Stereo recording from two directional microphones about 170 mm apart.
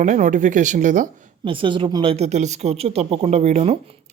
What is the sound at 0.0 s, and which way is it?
Speech, 45° right (ahead or behind).